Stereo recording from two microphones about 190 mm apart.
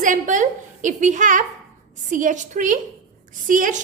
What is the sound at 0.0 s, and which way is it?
A woman's voice, 40° right (ahead or behind).